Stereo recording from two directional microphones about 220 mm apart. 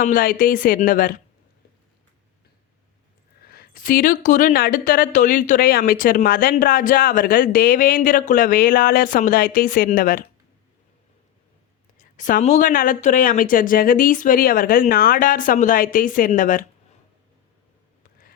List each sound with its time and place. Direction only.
0.0 s speech: 40° left (ahead or behind)
3.4 s speech: 45° left (ahead or behind)
11.9 s speech: 35° left (ahead or behind)